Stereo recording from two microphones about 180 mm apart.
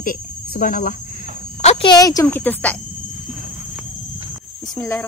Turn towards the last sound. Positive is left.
turn(degrees=15)  # may be behind; listen again after turning